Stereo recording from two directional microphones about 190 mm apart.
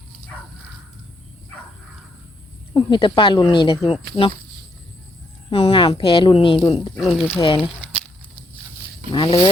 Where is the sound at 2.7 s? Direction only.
25° left (ahead or behind).